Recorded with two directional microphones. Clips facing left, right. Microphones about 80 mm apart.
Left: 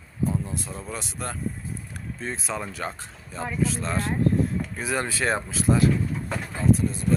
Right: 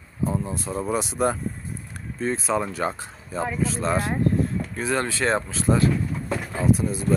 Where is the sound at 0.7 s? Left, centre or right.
Centre.